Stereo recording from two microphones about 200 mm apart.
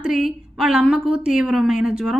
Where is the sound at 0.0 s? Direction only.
Centre (ahead or behind).